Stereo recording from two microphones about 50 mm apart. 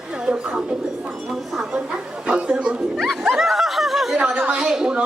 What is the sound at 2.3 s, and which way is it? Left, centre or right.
Speech, right.